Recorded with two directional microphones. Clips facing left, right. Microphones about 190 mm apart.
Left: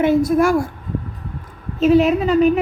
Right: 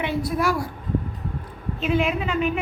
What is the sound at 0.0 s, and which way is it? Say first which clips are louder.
Speech: left 9 dB; 45° left (ahead or behind).